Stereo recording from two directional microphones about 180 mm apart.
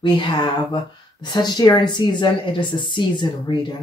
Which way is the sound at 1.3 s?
20° left (ahead or behind).